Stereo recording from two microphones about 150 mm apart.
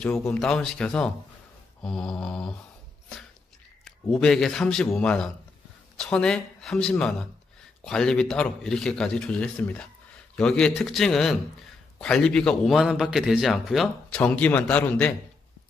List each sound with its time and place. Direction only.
0.0 s a man's voice: 10° left (ahead or behind)
4.1 s a man's voice: 5° left (ahead or behind)